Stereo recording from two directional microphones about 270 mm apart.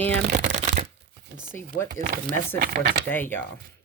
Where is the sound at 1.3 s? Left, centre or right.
Right.